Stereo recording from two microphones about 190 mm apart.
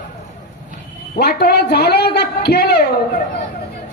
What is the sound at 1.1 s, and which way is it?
A woman's voice, 60° left (ahead or behind).